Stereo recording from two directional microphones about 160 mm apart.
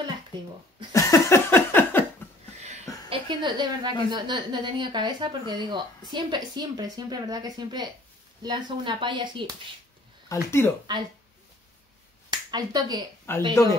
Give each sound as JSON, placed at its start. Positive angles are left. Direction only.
{"t": 0.9, "sound": "a sound", "side_deg": 15}
{"t": 2.6, "sound": "a sound", "side_deg": -45}
{"t": 3.3, "sound": "speech", "side_deg": -30}
{"t": 10.2, "sound": "speech", "side_deg": 15}
{"t": 12.3, "sound": "speech", "side_deg": -25}
{"t": 13.3, "sound": "speech", "side_deg": 15}